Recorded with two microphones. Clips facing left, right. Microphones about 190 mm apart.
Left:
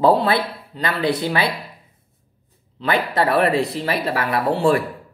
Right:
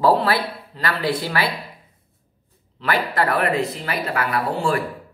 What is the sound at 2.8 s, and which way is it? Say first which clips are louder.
Speech: left 2 dB; 25° left (ahead or behind).